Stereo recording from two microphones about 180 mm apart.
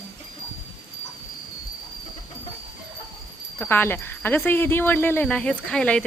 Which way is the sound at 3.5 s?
10° left (ahead or behind).